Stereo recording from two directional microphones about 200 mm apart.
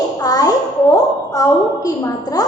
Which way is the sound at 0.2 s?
20° left (ahead or behind).